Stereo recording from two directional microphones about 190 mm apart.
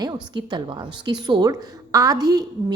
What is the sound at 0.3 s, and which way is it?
A woman's voice, 25° right (ahead or behind).